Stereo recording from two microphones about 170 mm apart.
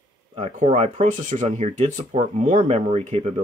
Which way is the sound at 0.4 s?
40° right (ahead or behind).